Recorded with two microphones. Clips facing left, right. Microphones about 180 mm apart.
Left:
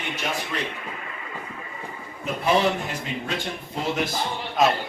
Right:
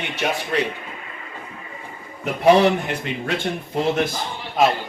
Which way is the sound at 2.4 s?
65° right (ahead or behind).